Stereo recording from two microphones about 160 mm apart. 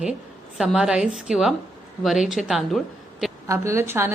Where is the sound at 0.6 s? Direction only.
5° right (ahead or behind).